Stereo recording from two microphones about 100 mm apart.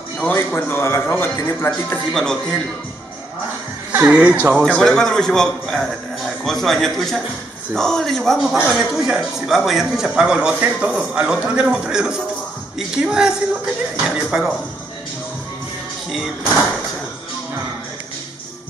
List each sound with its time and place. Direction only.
0.2 s a man's voice: 20° left (ahead or behind)
2.1 s a man's voice: 5° left (ahead or behind)
3.9 s speech: 15° right (ahead or behind)
4.6 s a man's voice: 5° left (ahead or behind)